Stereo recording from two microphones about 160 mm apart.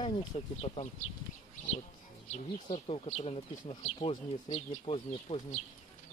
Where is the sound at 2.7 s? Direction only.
40° left (ahead or behind).